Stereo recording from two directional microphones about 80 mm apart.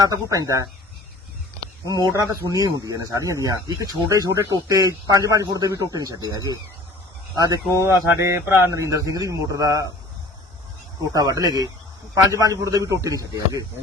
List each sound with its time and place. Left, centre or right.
0.0 s speech: right
2.0 s speech: right
8.2 s speech: right
8.7 s speech: right
11.1 s speech: right